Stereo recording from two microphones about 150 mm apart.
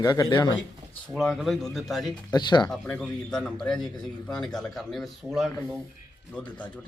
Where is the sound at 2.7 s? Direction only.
5° left (ahead or behind).